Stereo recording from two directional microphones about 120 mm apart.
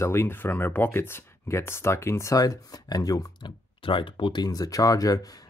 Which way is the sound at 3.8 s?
45° left (ahead or behind).